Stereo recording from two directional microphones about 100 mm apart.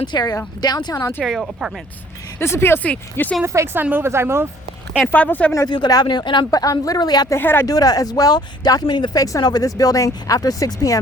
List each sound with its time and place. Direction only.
0.0 s speech: 45° left (ahead or behind)
1.2 s speech: centre (ahead or behind)
2.4 s speech: 25° left (ahead or behind)
3.4 s a woman's voice: 30° right (ahead or behind)
5.1 s speech: 15° left (ahead or behind)
5.6 s speech: 45° left (ahead or behind)
6.5 s speech: 35° left (ahead or behind)
7.3 s speech: 20° left (ahead or behind)
7.7 s speech: 35° left (ahead or behind)